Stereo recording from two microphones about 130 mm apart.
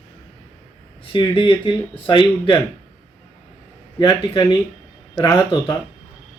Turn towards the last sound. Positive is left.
turn(degrees=35)  # may be behind; listen again after turning